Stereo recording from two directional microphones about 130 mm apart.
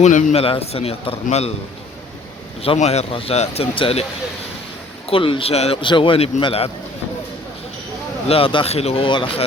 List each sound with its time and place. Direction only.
0.0 s a man's voice: 70° left (ahead or behind)
0.3 s a man's voice: 50° left (ahead or behind)
2.6 s a man's voice: 55° left (ahead or behind)
5.0 s a man's voice: 45° left (ahead or behind)
8.3 s a man's voice: 45° left (ahead or behind)